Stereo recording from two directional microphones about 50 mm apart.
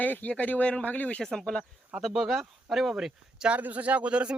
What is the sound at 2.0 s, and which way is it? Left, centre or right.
Speech, centre.